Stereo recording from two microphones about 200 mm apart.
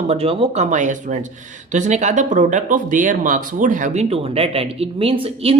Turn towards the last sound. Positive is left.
turn(degrees=-30)  # may be behind; listen again after turning